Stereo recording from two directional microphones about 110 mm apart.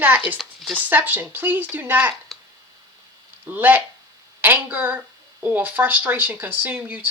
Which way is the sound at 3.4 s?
15° right (ahead or behind).